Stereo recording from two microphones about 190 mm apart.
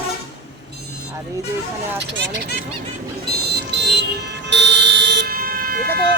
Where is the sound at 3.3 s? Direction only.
60° right (ahead or behind).